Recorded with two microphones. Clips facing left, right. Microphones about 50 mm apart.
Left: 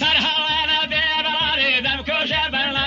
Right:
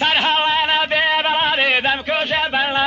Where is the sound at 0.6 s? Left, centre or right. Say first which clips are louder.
Right 4 dB; centre.